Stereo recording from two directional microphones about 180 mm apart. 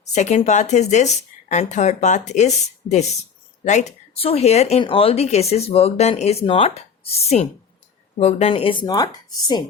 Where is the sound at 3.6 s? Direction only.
40° left (ahead or behind); by 9.1 s 20° left (ahead or behind).